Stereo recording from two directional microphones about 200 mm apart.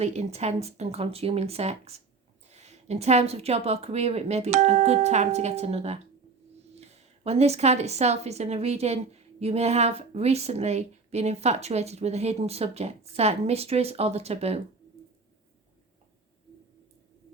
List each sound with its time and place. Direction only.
0.0 s a woman's voice: 35° right (ahead or behind)
7.3 s a woman's voice: 30° right (ahead or behind)